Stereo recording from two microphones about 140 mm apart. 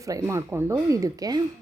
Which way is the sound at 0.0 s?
20° right (ahead or behind).